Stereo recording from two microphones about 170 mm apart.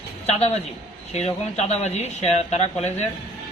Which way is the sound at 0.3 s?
40° left (ahead or behind).